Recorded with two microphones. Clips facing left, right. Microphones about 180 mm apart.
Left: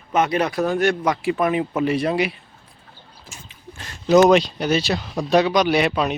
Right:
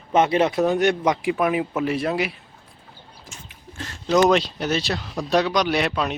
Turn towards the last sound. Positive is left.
turn(degrees=5)  # may be behind; listen again after turning